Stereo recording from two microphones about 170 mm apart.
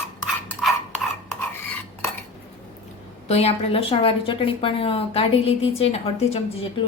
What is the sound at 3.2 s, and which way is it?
A woman's voice, 35° left (ahead or behind).